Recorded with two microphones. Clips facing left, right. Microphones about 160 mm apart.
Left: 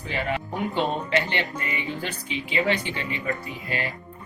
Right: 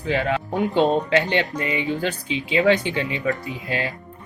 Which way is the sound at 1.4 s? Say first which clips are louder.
Right 6 dB; 90° right.